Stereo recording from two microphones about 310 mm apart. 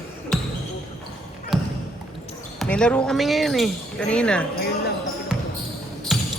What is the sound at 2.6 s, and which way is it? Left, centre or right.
Speech, centre.